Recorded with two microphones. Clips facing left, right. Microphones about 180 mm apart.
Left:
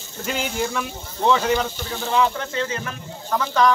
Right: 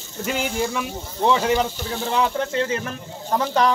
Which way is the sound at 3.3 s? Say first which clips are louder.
Even; 35° right (ahead or behind).